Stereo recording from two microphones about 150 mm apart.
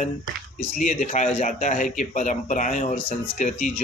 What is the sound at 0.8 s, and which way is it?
A man's voice, 55° left (ahead or behind).